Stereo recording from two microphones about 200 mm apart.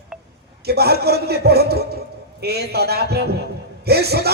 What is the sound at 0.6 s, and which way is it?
A man's voice, 50° right (ahead or behind).